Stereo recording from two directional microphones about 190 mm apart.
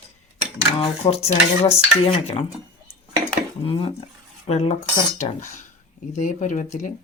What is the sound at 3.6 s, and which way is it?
Speech, 30° left (ahead or behind).